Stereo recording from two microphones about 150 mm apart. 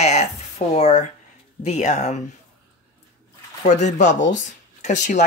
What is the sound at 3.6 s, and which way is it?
Speech, 50° left (ahead or behind).